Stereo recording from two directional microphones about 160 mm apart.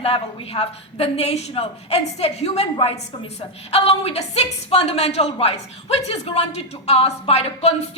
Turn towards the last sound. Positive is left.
turn(degrees=40)  # may be behind; listen again after turning